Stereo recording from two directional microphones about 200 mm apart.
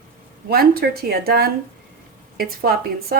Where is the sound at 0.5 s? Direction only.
50° right (ahead or behind).